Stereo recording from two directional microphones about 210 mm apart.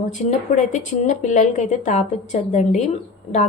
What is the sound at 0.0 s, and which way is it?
A woman's voice, 35° left (ahead or behind).